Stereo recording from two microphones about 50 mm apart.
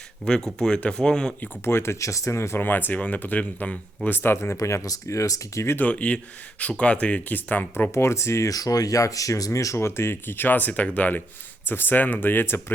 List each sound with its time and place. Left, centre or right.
0.3 s speech: centre
1.6 s speech: left
2.6 s speech: left
4.1 s speech: left
5.9 s speech: left
7.7 s speech: left
9.0 s speech: left